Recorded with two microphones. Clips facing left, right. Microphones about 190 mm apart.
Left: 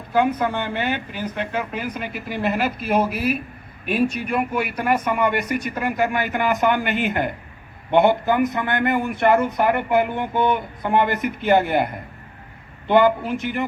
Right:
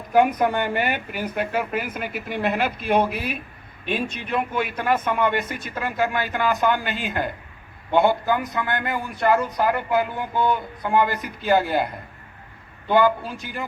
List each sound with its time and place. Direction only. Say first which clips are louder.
0.1 s a man's voice: right 1 dB; 15° right (ahead or behind); by 11.8 s 20° left (ahead or behind)
12.9 s a man's voice: left 3 dB; 20° left (ahead or behind)